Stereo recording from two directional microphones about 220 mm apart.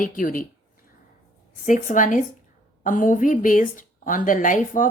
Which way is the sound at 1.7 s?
35° left (ahead or behind).